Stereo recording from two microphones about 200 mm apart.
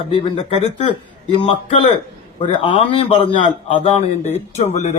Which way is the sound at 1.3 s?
25° left (ahead or behind).